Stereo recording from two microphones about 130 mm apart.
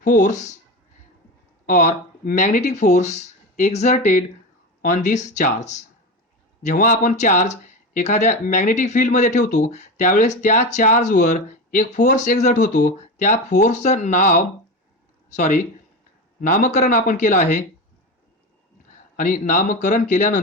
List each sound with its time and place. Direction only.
0.0 s speech: 85° left; by 0.5 s 70° left (ahead or behind)
1.6 s speech: 75° left (ahead or behind)
6.6 s speech: 75° left (ahead or behind)
16.4 s speech: 85° left
19.1 s speech: 90° left; by 20.4 s 75° left (ahead or behind)